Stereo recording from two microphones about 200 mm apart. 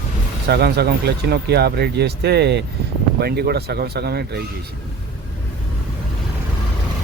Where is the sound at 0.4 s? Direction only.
55° right (ahead or behind).